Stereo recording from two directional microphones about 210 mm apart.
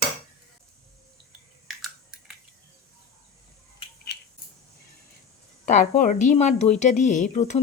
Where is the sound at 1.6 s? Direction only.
Centre (ahead or behind).